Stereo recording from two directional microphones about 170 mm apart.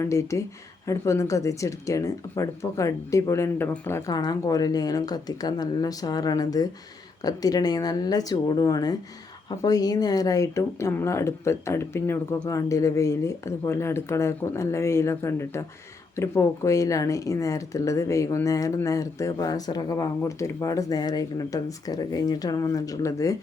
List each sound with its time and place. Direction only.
0.0 s speech: 15° left (ahead or behind)